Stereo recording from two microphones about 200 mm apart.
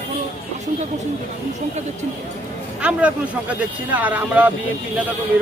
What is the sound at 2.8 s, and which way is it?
Speech, 5° right (ahead or behind).